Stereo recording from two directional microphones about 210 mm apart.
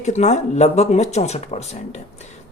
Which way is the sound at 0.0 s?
35° left (ahead or behind).